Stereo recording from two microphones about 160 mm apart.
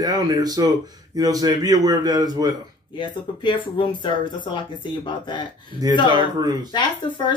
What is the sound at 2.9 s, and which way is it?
Speech, 30° left (ahead or behind).